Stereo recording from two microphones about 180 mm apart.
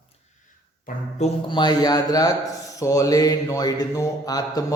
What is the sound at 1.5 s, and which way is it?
A man's voice, 25° left (ahead or behind).